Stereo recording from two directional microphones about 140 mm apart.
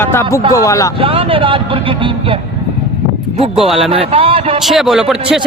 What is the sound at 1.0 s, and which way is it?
Speech, 40° right (ahead or behind).